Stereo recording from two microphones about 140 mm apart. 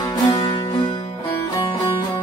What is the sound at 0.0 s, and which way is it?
Music, 25° left (ahead or behind).